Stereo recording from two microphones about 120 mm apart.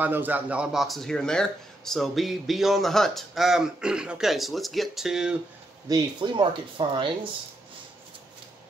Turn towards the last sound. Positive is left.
turn(degrees=-45)  # may be behind; listen again after turning